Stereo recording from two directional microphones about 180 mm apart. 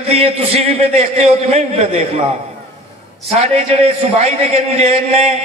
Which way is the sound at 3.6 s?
35° right (ahead or behind).